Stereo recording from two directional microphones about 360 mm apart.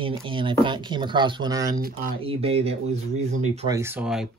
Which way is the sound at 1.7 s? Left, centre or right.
Right.